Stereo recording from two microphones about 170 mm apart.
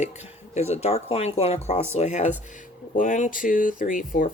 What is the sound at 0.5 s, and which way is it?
Speech, 40° left (ahead or behind).